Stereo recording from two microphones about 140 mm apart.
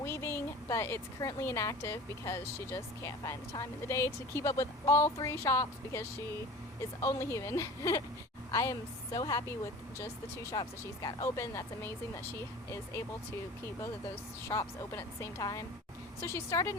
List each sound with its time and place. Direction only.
0.0 s speech: 20° left (ahead or behind)
14.4 s speech: 20° left (ahead or behind)